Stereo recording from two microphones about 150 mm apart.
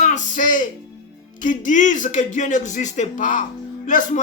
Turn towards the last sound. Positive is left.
turn(degrees=60)  # may be behind; listen again after turning